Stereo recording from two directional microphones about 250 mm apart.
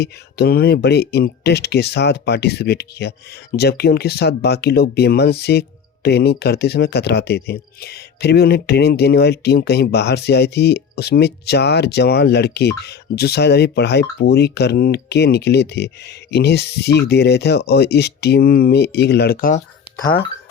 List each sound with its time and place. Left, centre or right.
0.0 s speech: left
20.0 s speech: centre